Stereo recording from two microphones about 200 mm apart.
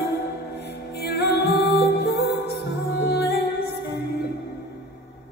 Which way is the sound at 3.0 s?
55° left (ahead or behind).